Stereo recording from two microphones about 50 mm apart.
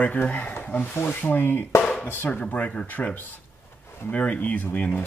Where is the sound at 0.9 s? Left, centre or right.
Left.